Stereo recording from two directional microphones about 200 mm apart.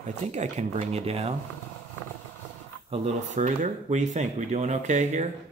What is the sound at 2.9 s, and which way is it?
Speech, 35° right (ahead or behind).